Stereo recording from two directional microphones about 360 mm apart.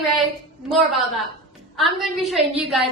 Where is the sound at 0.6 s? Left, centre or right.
Centre.